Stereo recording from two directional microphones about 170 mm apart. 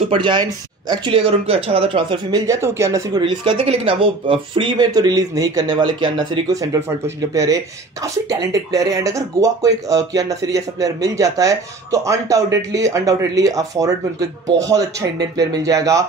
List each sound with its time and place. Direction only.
0.1 s speech: 30° right (ahead or behind)
3.2 s speech: 30° right (ahead or behind)
8.0 s speech: 20° right (ahead or behind)